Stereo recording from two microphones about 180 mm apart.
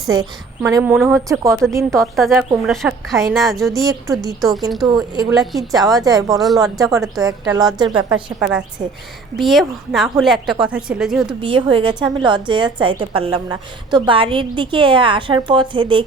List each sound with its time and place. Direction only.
0.1 s a woman's voice: 20° right (ahead or behind)
0.8 s a woman's voice: 5° right (ahead or behind)
4.9 s a woman's voice: 20° right (ahead or behind)
5.4 s a woman's voice: centre (ahead or behind)
5.8 s a woman's voice: 20° right (ahead or behind)
6.3 s a woman's voice: centre (ahead or behind)
7.2 s a woman's voice: 20° right (ahead or behind)
8.1 s a woman's voice: 5° right (ahead or behind)
11.3 s a woman's voice: 30° right (ahead or behind)